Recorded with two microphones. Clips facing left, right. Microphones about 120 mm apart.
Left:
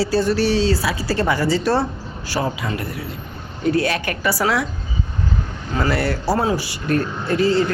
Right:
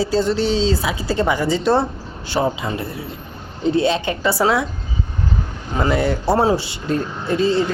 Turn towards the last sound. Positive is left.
turn(degrees=-20)  # may be behind; listen again after turning